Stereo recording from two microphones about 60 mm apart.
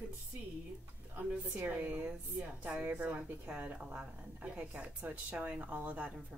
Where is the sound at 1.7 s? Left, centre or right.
Right.